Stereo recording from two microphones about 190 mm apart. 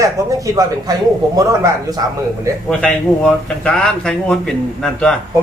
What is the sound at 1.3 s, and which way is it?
Speech, 20° right (ahead or behind).